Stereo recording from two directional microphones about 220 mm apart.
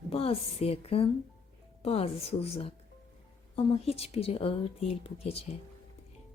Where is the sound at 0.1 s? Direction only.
25° left (ahead or behind).